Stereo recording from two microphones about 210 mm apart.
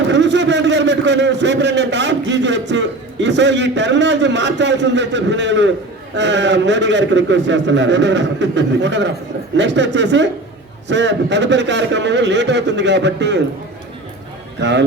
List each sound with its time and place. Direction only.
0.1 s a man's voice: 55° right (ahead or behind)
14.6 s a man's voice: 55° right (ahead or behind)